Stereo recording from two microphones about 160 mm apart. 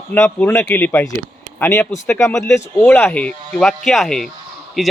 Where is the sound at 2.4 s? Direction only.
20° left (ahead or behind).